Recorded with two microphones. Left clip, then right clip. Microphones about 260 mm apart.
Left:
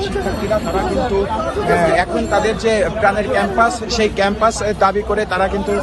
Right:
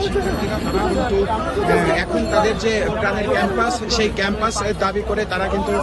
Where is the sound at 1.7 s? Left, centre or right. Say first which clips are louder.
Left 4 dB; centre.